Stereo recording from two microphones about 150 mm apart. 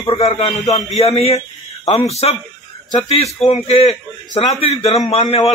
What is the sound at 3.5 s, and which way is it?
A man's voice, 40° left (ahead or behind).